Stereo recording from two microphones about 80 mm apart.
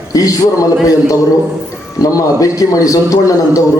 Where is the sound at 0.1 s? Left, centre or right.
Left.